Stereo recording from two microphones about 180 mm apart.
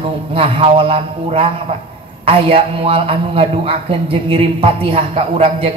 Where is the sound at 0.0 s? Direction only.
30° right (ahead or behind).